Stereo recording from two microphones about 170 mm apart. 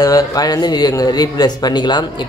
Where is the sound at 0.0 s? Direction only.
20° left (ahead or behind).